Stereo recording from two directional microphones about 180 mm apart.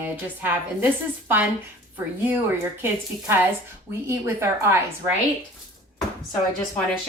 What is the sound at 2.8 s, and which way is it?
A woman's voice, 15° right (ahead or behind).